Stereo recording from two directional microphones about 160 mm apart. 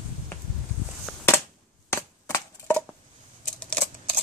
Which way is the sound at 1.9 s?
15° left (ahead or behind).